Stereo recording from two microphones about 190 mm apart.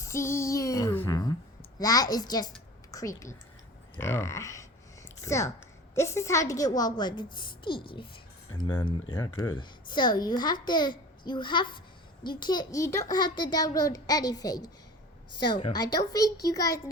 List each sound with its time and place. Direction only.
0.0 s a sound: 15° left (ahead or behind)
1.8 s a child's voice: 20° left (ahead or behind)
9.4 s a child's voice: 25° left (ahead or behind)
15.7 s a child's voice: 20° left (ahead or behind)